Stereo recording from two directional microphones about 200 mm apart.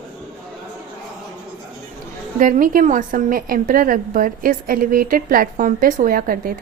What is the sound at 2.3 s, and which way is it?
A woman's voice, 40° right (ahead or behind).